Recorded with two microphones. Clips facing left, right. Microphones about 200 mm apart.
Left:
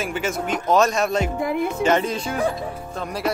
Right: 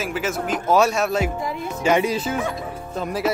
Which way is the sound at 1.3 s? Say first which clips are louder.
Left 5 dB; 55° left (ahead or behind).